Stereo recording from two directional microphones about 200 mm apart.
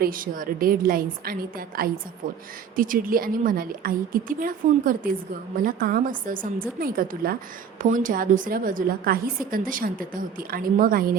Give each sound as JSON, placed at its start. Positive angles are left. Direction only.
{"t": 0.0, "sound": "a woman's voice", "side_deg": -45}